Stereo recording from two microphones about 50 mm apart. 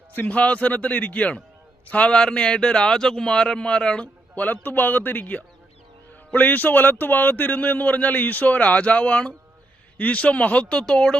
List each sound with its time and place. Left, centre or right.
0.3 s speech: left
2.0 s a man's voice: centre
4.4 s speech: left; by 11.2 s centre